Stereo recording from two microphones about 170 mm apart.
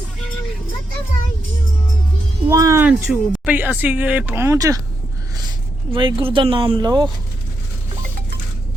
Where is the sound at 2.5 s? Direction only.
20° right (ahead or behind).